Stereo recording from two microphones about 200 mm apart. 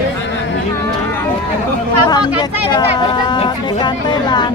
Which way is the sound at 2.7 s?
20° left (ahead or behind).